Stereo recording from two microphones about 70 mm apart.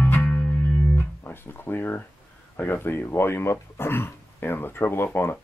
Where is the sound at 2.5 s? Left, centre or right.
Left.